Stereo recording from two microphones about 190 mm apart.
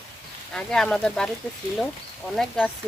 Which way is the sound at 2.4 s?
5° left (ahead or behind).